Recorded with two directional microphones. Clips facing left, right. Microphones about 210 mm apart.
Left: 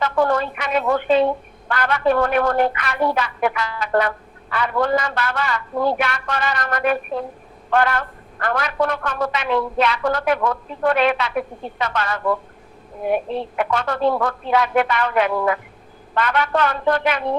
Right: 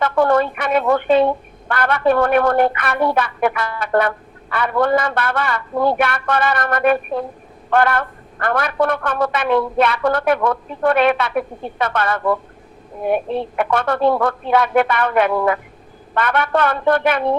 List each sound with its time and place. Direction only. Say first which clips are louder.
0.0 s a woman's voice: right 4 dB; 55° right (ahead or behind)